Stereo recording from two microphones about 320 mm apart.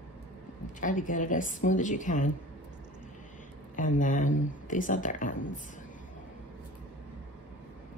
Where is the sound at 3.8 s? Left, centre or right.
Left.